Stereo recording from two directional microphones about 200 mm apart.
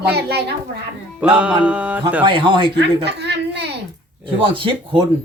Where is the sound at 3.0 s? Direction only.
55° right (ahead or behind).